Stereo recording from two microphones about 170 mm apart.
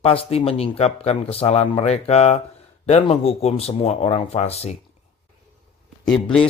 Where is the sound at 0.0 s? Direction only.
35° left (ahead or behind).